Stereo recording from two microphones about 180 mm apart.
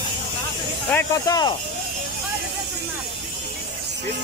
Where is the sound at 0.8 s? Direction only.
10° left (ahead or behind).